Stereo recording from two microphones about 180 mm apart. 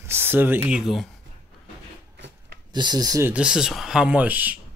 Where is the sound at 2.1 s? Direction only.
75° right (ahead or behind).